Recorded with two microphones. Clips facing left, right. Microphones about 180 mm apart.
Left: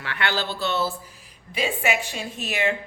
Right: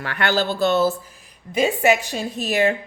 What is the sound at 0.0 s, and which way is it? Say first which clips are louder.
Speech: right 6 dB; 45° right (ahead or behind).